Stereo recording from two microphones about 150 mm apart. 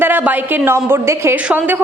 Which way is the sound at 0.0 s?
10° right (ahead or behind).